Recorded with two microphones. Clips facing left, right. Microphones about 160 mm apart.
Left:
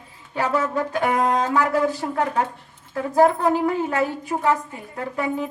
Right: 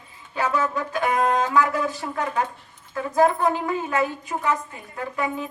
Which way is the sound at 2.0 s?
40° left (ahead or behind).